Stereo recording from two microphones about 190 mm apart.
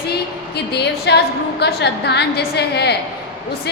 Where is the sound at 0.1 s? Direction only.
60° left (ahead or behind).